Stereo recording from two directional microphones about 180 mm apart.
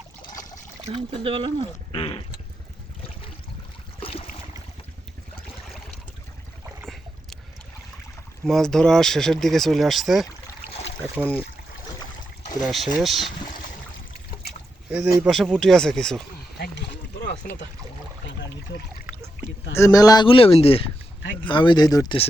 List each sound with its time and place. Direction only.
0.2 s trickle: 20° left (ahead or behind)
0.9 s speech: 30° right (ahead or behind)
1.9 s speech: 30° left (ahead or behind)
4.0 s boat: 30° left (ahead or behind)
6.8 s boat: centre (ahead or behind)
8.4 s speech: 5° left (ahead or behind)
10.7 s boat: 35° left (ahead or behind)
11.1 s speech: 5° left (ahead or behind)
12.6 s speech: centre (ahead or behind)
14.8 s speech: 5° right (ahead or behind)
16.6 s boat: 70° left (ahead or behind)
19.7 s speech: 20° left (ahead or behind)